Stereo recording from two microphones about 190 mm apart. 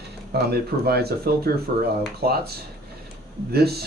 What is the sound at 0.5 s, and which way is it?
Speech, 55° right (ahead or behind).